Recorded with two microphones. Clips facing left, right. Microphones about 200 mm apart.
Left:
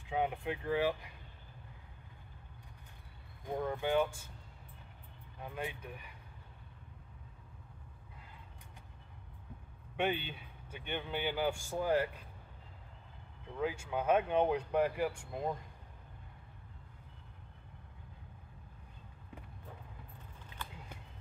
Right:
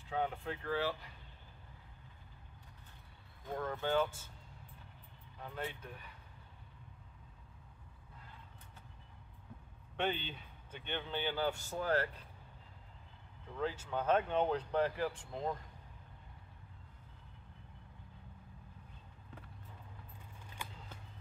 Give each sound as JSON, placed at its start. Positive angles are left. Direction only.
{"t": 0.1, "sound": "a man's voice", "side_deg": 15}
{"t": 3.4, "sound": "a man's voice", "side_deg": 15}
{"t": 5.4, "sound": "a man's voice", "side_deg": 15}
{"t": 9.9, "sound": "a man's voice", "side_deg": 10}
{"t": 13.6, "sound": "a man's voice", "side_deg": 10}